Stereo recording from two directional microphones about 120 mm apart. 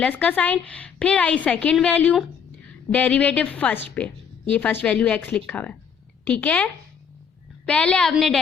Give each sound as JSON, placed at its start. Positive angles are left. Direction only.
{"t": 0.0, "sound": "a woman's voice", "side_deg": 10}
{"t": 7.7, "sound": "a woman's voice", "side_deg": 10}